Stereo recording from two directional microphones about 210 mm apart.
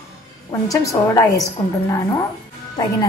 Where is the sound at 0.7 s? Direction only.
15° left (ahead or behind).